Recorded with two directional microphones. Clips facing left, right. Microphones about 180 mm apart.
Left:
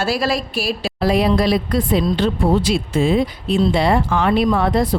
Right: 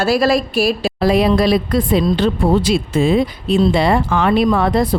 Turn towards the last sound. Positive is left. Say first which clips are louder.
# right 2 dB
turn(degrees=-90)